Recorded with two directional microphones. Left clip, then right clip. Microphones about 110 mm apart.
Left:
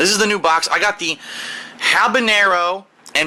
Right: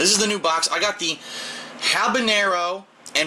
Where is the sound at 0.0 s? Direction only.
15° left (ahead or behind).